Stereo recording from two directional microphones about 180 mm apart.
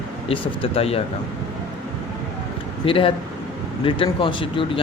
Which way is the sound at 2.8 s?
30° left (ahead or behind).